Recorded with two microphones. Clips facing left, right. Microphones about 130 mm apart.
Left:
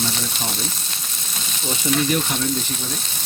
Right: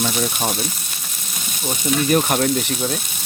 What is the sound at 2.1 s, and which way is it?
Speech, 60° right (ahead or behind).